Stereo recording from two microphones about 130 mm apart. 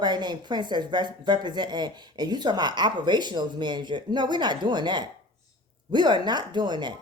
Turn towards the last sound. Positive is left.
turn(degrees=-35)  # may be behind; listen again after turning